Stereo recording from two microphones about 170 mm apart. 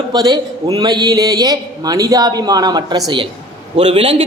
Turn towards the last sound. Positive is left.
turn(degrees=-35)  # may be behind; listen again after turning